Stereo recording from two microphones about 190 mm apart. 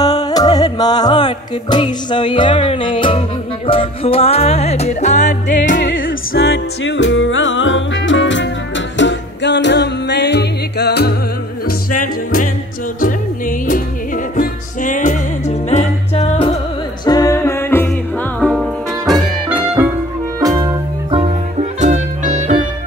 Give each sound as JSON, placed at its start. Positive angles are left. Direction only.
{"t": 0.0, "sound": "music", "side_deg": 20}
{"t": 6.3, "sound": "music", "side_deg": 75}
{"t": 13.0, "sound": "music", "side_deg": 45}
{"t": 17.0, "sound": "music", "side_deg": 20}
{"t": 18.4, "sound": "music", "side_deg": 0}
{"t": 20.3, "sound": "music", "side_deg": -20}